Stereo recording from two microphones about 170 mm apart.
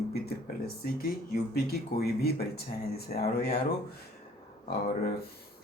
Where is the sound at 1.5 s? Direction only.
65° left (ahead or behind).